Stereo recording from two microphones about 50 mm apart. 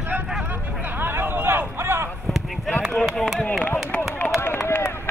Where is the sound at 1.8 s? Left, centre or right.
Right.